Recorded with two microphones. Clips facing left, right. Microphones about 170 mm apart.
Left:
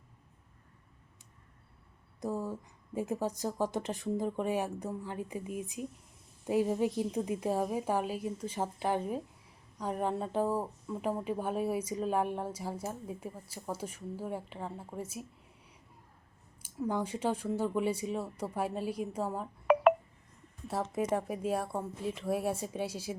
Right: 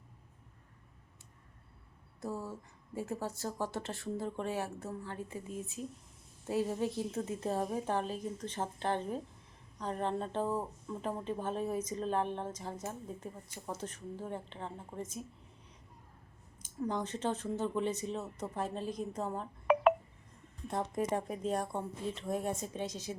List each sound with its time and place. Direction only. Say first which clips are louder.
2.2 s speech: left 4 dB; 15° left (ahead or behind)
16.6 s speech: left 2 dB; 10° left (ahead or behind)
20.9 s speech: left 3 dB; 5° left (ahead or behind)